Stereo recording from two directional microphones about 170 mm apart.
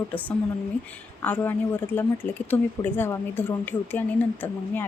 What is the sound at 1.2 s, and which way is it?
A woman's voice, 10° left (ahead or behind).